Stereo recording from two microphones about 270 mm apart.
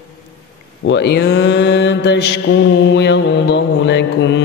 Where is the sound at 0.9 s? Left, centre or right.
Left.